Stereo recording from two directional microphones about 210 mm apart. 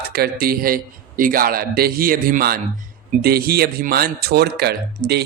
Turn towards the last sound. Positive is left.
turn(degrees=-50)  # may be behind; listen again after turning